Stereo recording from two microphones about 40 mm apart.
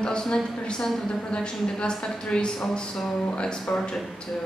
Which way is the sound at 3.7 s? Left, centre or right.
Left.